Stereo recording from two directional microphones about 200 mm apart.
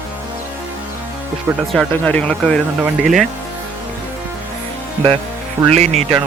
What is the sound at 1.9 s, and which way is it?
Speech, 5° left (ahead or behind).